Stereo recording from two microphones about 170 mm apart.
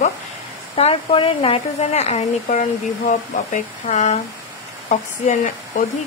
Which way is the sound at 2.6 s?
50° left (ahead or behind).